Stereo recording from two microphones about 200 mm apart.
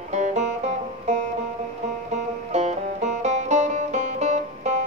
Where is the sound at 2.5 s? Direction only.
35° right (ahead or behind).